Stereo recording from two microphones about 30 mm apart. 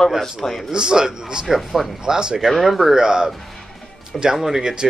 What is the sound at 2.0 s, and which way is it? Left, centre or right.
Speech, right.